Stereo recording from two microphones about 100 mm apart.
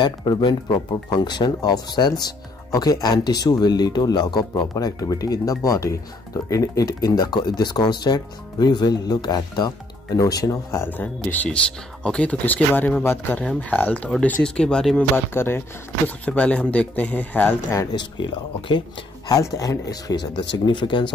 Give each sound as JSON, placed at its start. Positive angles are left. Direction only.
{"t": 0.0, "sound": "speech", "side_deg": 50}
{"t": 11.0, "sound": "speech", "side_deg": 15}
{"t": 15.1, "sound": "speech", "side_deg": 25}
{"t": 16.3, "sound": "speech", "side_deg": 10}
{"t": 19.2, "sound": "speech", "side_deg": 35}